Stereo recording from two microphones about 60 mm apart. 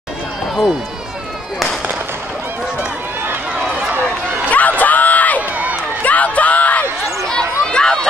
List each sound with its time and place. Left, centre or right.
3.5 s run: centre
4.5 s crowd: left
6.0 s a sound: left
7.2 s run: centre